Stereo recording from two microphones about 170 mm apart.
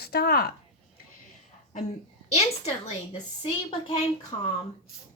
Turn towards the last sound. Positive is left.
turn(degrees=25)  # may be behind; listen again after turning